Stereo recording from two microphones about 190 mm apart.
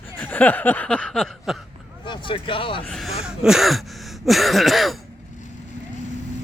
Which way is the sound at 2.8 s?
Centre (ahead or behind).